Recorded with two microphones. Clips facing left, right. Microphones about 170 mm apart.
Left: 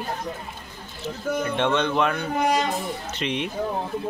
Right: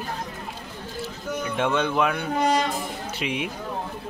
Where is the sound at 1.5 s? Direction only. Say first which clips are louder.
Right 1 dB; 5° right (ahead or behind).